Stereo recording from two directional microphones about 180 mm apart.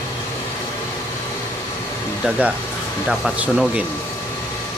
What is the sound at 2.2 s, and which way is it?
Speech, 5° right (ahead or behind).